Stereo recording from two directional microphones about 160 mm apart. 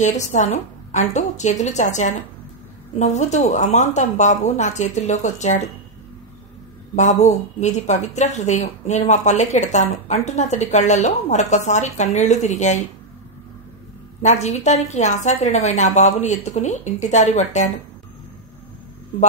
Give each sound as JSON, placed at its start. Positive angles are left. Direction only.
{"t": 0.0, "sound": "speech", "side_deg": 50}
{"t": 7.0, "sound": "speech", "side_deg": 45}
{"t": 14.2, "sound": "speech", "side_deg": 45}